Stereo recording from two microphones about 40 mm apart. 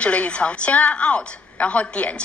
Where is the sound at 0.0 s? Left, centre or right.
Left.